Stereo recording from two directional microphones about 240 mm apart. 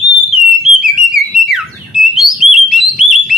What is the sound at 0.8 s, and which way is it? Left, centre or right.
Whistle, centre.